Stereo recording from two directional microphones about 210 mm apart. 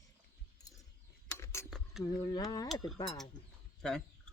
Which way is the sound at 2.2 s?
20° left (ahead or behind).